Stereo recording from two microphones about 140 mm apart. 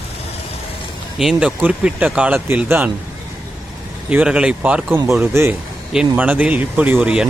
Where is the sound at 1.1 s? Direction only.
5° right (ahead or behind).